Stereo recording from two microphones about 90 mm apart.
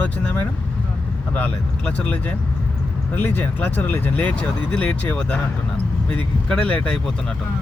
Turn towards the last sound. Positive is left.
turn(degrees=15)  # may be behind; listen again after turning